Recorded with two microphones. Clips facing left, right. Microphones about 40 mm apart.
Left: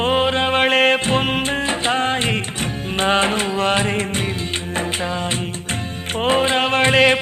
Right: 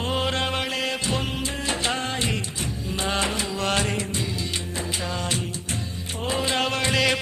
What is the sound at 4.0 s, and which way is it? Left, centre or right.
Music, left.